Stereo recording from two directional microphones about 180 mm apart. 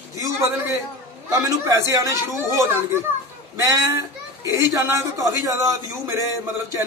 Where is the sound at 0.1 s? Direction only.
20° right (ahead or behind).